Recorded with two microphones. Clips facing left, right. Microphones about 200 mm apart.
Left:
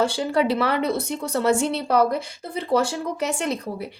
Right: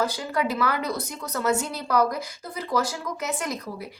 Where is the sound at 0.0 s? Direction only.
30° left (ahead or behind).